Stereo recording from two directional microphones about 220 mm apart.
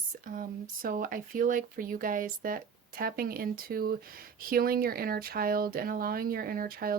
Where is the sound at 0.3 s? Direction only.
40° right (ahead or behind).